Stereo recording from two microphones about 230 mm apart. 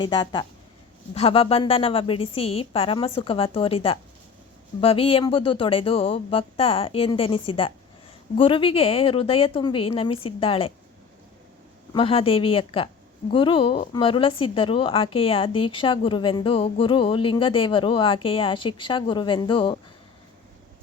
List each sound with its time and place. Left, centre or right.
0.0 s speech: centre
11.9 s speech: left